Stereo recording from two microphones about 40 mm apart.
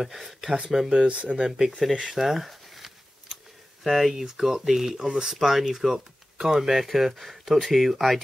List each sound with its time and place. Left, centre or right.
0.6 s speech: centre
1.0 s speech: right
2.0 s a sound: centre
3.8 s speech: centre
6.3 s speech: centre
6.8 s speech: centre